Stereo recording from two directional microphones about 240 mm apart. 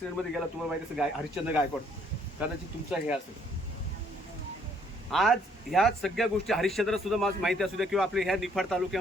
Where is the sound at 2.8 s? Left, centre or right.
Centre.